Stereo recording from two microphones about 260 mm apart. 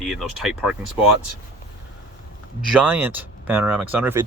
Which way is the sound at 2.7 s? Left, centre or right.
Centre.